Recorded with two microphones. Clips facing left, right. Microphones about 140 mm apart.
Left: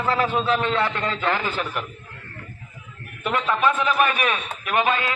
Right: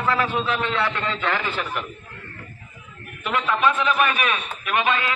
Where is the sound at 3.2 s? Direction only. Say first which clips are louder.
Even; 40° left (ahead or behind).